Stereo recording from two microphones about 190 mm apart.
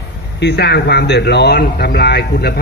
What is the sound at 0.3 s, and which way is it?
Speech, 60° left (ahead or behind).